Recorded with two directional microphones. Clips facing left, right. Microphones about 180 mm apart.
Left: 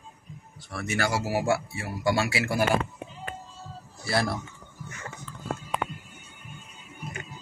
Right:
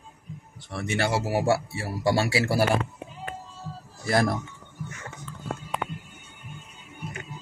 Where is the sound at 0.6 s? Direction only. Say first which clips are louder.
Right 1 dB; 25° right (ahead or behind).